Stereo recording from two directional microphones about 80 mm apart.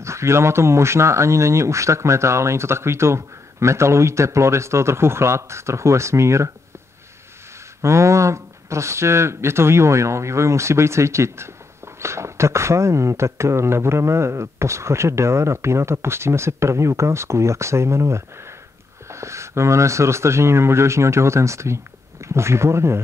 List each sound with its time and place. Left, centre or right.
0.0 s speech: right
7.8 s speech: right